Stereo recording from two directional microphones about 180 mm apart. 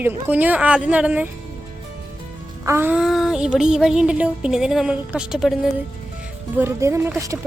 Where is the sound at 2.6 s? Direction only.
10° right (ahead or behind).